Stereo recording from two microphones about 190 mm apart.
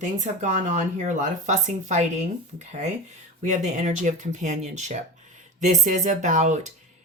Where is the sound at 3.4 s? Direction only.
40° right (ahead or behind).